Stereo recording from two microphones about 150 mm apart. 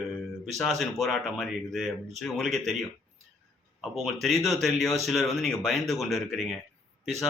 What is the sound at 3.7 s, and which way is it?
Speech, centre (ahead or behind).